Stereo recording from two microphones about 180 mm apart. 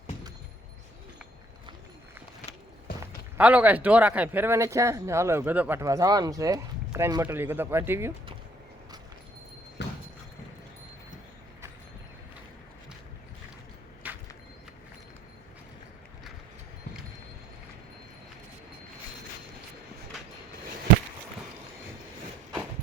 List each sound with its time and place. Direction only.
3.3 s speech: 10° right (ahead or behind)
9.8 s dog: 75° left (ahead or behind)
14.0 s vehicle: 10° right (ahead or behind)